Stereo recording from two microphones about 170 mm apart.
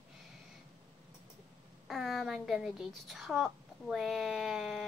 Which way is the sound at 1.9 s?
Centre (ahead or behind).